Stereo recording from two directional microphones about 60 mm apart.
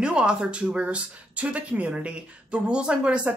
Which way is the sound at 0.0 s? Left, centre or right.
Centre.